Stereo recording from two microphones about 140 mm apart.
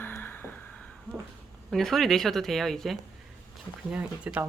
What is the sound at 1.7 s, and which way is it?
Speech, centre (ahead or behind).